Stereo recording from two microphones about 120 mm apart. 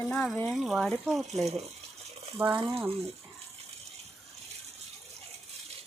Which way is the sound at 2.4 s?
15° right (ahead or behind).